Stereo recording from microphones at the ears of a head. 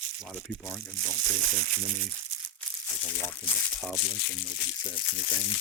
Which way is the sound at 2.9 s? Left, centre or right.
Left.